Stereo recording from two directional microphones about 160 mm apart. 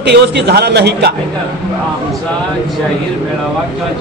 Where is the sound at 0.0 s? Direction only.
90° right.